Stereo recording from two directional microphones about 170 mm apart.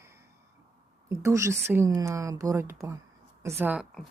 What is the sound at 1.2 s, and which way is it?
Speech, 15° right (ahead or behind).